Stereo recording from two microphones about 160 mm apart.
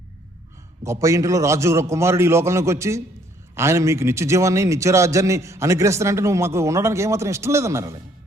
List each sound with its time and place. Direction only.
0.9 s a man's voice: 20° right (ahead or behind)